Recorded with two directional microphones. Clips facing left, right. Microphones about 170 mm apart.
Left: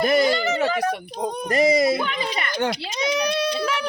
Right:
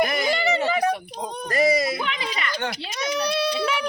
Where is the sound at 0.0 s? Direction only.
30° left (ahead or behind).